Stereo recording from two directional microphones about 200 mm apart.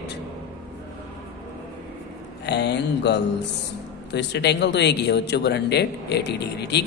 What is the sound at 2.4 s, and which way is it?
Speech, 60° left (ahead or behind).